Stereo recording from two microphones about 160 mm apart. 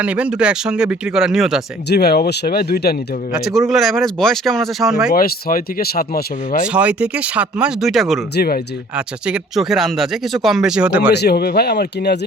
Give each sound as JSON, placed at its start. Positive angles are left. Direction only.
{"t": 0.0, "sound": "speech", "side_deg": -10}
{"t": 1.9, "sound": "speech", "side_deg": 80}
{"t": 3.3, "sound": "speech", "side_deg": 0}
{"t": 5.1, "sound": "speech", "side_deg": 65}
{"t": 6.7, "sound": "speech", "side_deg": -10}
{"t": 8.4, "sound": "speech", "side_deg": 75}
{"t": 9.0, "sound": "speech", "side_deg": -5}
{"t": 11.1, "sound": "speech", "side_deg": 85}